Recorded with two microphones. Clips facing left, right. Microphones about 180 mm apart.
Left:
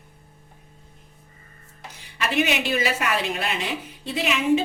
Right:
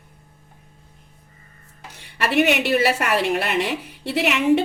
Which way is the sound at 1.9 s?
70° right (ahead or behind).